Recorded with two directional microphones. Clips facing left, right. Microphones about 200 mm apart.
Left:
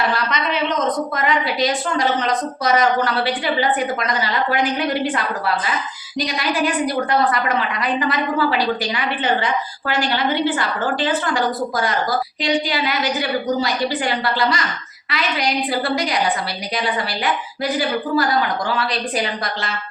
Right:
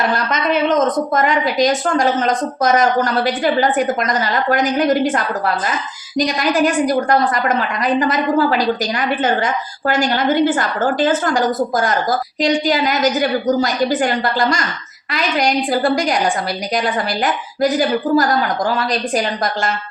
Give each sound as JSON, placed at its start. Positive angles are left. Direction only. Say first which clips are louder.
{"t": 0.0, "sound": "a woman's voice", "louder": "right 3 dB", "side_deg": -45}